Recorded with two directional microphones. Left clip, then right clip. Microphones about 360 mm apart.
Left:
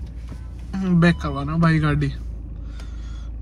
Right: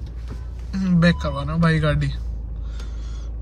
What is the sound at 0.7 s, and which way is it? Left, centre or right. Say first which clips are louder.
A man's voice: even; centre.